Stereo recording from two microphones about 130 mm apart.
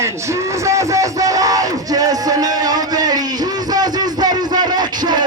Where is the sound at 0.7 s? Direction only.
25° right (ahead or behind).